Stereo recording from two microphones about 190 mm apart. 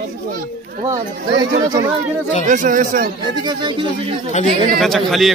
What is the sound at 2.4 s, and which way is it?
Speech, 40° right (ahead or behind).